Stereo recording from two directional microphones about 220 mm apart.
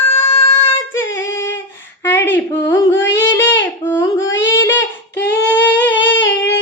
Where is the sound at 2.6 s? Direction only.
15° left (ahead or behind).